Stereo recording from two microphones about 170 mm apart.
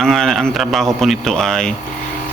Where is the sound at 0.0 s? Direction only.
5° left (ahead or behind).